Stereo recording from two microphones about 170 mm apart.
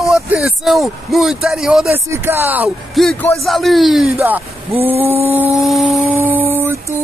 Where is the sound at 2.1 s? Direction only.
15° right (ahead or behind).